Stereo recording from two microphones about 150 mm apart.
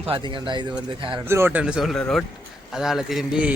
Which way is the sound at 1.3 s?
15° right (ahead or behind).